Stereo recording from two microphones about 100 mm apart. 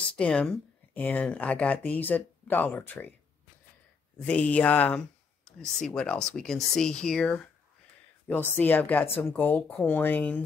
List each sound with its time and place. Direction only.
0.1 s speech: 10° left (ahead or behind)
4.2 s speech: 15° left (ahead or behind)